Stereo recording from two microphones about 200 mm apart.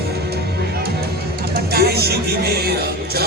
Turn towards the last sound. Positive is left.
turn(degrees=-50)  # may be behind; listen again after turning